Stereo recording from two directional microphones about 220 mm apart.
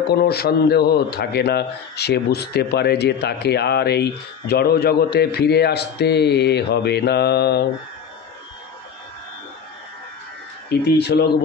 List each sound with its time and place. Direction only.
0.0 s a man's voice: 45° left (ahead or behind)
11.0 s a man's voice: 50° left (ahead or behind)